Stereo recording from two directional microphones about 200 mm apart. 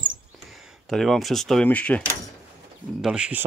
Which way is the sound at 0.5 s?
Centre (ahead or behind).